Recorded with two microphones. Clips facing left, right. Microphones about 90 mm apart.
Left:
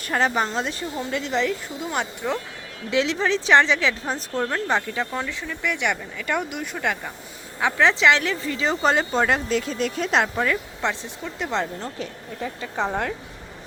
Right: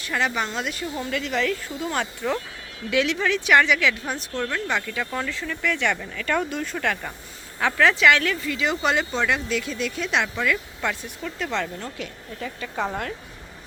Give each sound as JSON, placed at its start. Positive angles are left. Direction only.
{"t": 0.0, "sound": "a woman's voice", "side_deg": 40}
{"t": 2.9, "sound": "a woman's voice", "side_deg": 30}
{"t": 5.1, "sound": "speech", "side_deg": 15}
{"t": 10.8, "sound": "a woman's voice", "side_deg": 20}